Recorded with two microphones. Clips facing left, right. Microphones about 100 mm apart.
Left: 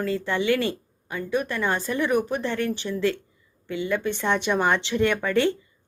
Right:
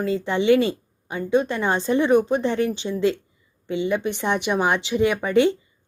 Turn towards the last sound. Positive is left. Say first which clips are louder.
# right 3 dB
turn(degrees=-15)  # may be behind; listen again after turning